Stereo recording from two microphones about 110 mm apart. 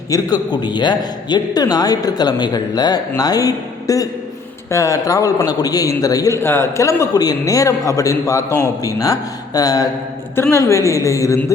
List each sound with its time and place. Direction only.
0.1 s a man's voice: 40° left (ahead or behind)
10.3 s speech: 25° left (ahead or behind)